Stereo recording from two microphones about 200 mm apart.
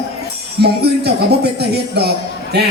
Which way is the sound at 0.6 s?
55° right (ahead or behind).